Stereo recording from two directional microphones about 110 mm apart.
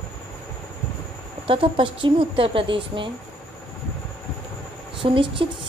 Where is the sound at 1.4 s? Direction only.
55° right (ahead or behind).